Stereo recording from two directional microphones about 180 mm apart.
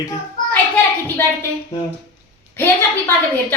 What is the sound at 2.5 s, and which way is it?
A woman's voice, 15° left (ahead or behind).